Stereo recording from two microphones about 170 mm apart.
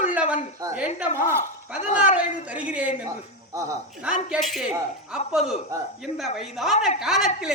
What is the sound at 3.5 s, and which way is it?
Speech, 20° right (ahead or behind).